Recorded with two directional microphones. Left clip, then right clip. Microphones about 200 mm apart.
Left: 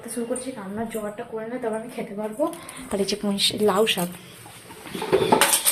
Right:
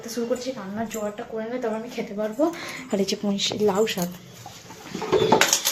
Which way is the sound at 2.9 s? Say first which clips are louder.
Even; 30° right (ahead or behind).